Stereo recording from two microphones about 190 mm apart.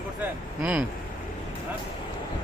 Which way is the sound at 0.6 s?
5° right (ahead or behind).